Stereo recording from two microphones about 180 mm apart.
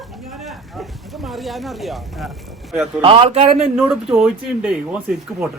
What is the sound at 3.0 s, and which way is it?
Speech, 30° right (ahead or behind).